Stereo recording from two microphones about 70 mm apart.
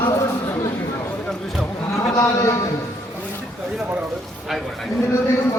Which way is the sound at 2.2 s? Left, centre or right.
Left.